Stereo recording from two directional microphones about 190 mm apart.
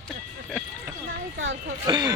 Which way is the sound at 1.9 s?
20° right (ahead or behind).